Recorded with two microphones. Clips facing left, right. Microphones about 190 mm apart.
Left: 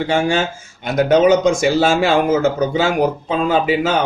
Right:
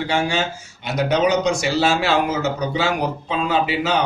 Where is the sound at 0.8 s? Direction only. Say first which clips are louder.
Left 6 dB; 50° left (ahead or behind).